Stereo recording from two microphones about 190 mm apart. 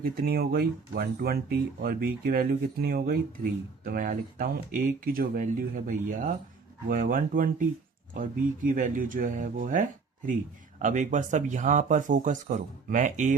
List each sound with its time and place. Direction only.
0.0 s speech: 55° right (ahead or behind)